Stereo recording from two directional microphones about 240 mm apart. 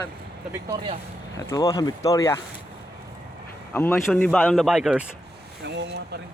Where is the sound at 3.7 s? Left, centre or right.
Centre.